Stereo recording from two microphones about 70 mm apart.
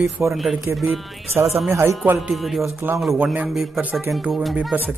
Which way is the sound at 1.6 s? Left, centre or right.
Right.